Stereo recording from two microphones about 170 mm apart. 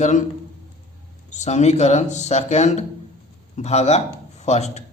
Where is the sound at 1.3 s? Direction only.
45° left (ahead or behind).